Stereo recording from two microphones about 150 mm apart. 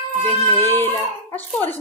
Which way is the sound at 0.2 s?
15° left (ahead or behind).